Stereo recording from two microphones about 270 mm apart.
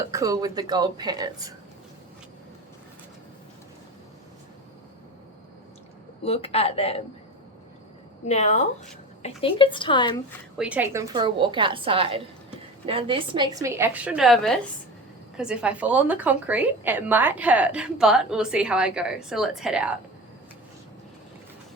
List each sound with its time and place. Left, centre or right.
0.1 s a woman's voice: centre
6.2 s speech: left
8.3 s speech: left
10.6 s a woman's voice: centre